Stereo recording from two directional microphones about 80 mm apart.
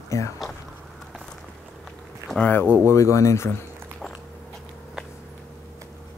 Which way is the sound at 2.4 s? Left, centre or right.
Left.